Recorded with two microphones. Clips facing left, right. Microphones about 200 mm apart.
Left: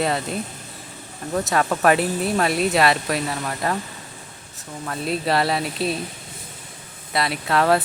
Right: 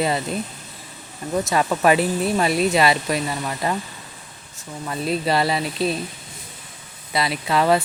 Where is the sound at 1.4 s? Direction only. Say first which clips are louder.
Even; centre (ahead or behind).